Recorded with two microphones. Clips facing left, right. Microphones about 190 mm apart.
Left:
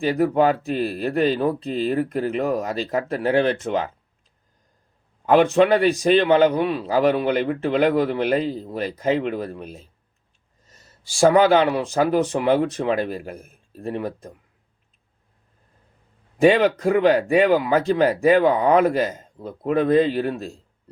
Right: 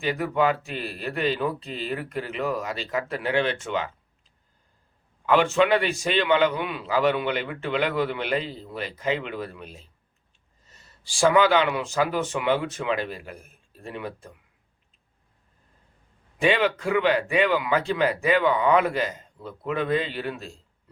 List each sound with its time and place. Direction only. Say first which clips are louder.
0.0 s a man's voice: left 5 dB; 40° left (ahead or behind)
5.2 s a man's voice: left 5 dB; 40° left (ahead or behind)
16.4 s a man's voice: left 7 dB; 40° left (ahead or behind)